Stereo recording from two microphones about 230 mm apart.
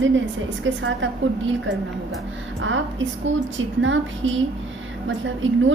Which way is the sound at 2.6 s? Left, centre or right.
Right.